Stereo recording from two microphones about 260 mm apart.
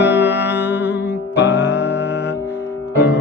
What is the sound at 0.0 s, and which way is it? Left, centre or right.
Music, centre.